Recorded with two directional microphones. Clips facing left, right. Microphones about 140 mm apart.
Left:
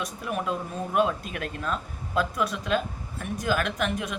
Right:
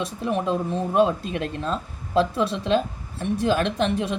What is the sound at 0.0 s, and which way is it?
Speech, 25° right (ahead or behind).